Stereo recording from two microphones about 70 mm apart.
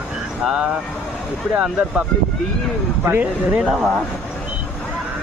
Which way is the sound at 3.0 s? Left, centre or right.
Right.